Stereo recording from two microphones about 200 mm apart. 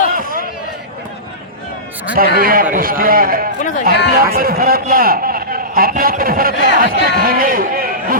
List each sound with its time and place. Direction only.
0.2 s a sound: 45° right (ahead or behind)
2.1 s a man's voice: 45° right (ahead or behind)
3.6 s a man's voice: 40° left (ahead or behind)
4.4 s a man's voice: 45° right (ahead or behind)